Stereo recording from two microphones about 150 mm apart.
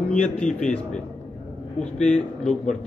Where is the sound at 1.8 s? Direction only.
5° left (ahead or behind).